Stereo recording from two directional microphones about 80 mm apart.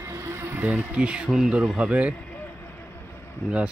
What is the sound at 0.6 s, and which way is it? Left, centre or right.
Speech, centre.